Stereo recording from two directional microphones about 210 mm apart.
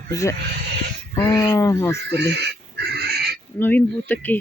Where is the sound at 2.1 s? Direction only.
55° right (ahead or behind).